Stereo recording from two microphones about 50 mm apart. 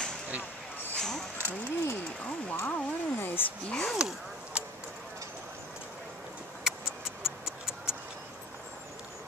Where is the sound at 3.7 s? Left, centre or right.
Centre.